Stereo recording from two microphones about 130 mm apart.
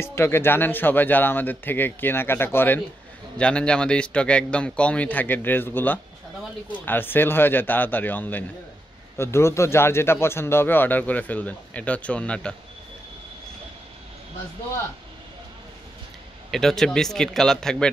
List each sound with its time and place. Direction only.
0.0 s a man's voice: 20° left (ahead or behind)
16.4 s speech: 5° left (ahead or behind)